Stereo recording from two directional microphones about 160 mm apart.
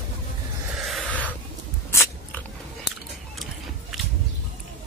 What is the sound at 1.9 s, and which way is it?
Biting, 15° left (ahead or behind).